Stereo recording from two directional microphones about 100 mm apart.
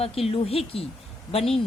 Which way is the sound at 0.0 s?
80° left.